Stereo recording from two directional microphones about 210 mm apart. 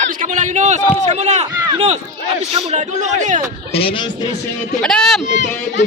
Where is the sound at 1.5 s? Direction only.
20° right (ahead or behind); by 3.4 s 35° right (ahead or behind).